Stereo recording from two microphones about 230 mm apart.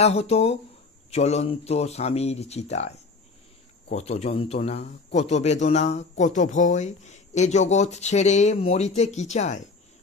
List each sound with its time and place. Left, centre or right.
0.0 s speech: left
3.9 s speech: left